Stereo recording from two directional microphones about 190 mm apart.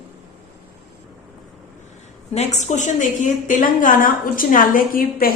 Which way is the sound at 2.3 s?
35° left (ahead or behind).